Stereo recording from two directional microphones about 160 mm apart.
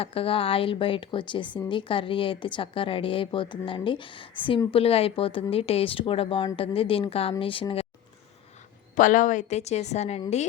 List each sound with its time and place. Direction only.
0.0 s a woman's voice: 35° left (ahead or behind)
9.0 s a woman's voice: 55° left (ahead or behind)